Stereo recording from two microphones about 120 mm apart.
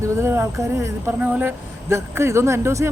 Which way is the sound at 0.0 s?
25° right (ahead or behind).